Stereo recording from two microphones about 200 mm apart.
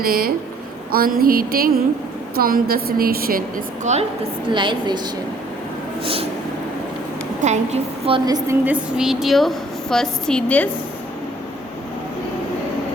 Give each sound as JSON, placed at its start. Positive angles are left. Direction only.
{"t": 0.0, "sound": "a woman's voice", "side_deg": -45}
{"t": 4.5, "sound": "a woman's voice", "side_deg": -25}
{"t": 7.4, "sound": "a woman's voice", "side_deg": -35}
{"t": 8.4, "sound": "a woman's voice", "side_deg": -10}